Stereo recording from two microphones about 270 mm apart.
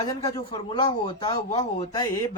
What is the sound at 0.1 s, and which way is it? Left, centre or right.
Speech, centre.